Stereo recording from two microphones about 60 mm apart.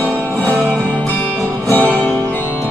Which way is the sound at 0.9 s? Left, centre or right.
Left.